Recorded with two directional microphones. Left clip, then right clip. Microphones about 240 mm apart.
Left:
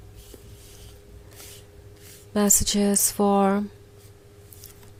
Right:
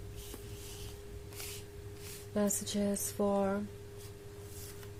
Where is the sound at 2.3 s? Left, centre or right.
Left.